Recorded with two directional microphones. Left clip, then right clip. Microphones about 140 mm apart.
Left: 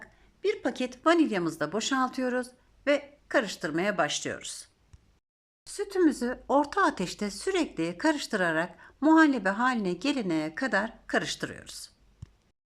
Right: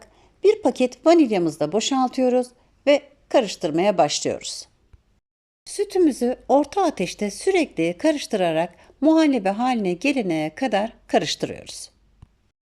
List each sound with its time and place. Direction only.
0.0 s speech: 25° right (ahead or behind)